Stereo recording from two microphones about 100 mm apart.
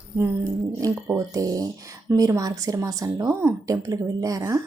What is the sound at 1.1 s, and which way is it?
Speech, 35° right (ahead or behind).